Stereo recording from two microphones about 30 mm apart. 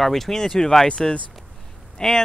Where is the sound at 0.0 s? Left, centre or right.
Centre.